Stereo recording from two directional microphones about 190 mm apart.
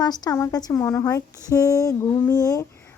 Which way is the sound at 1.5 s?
15° left (ahead or behind).